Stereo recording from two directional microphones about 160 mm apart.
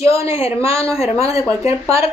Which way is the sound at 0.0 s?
35° left (ahead or behind).